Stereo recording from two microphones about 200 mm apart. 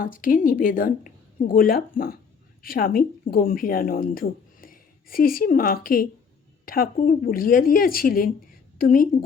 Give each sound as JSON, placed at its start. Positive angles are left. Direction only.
{"t": 0.0, "sound": "a woman's voice", "side_deg": 45}